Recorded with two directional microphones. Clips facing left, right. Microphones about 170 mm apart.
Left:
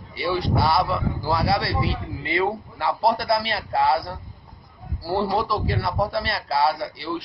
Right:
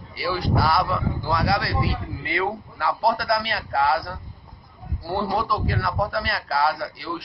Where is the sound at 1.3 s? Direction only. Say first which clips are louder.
Left 1 dB; 30° left (ahead or behind).